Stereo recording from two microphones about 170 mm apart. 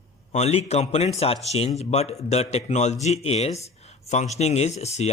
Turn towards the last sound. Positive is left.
turn(degrees=40)  # may be behind; listen again after turning